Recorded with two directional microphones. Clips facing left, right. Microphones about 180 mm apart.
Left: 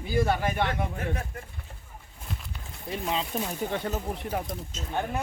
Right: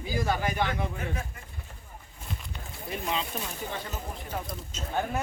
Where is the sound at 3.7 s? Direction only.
65° left (ahead or behind).